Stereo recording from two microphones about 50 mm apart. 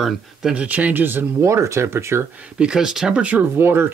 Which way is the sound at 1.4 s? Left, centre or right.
Right.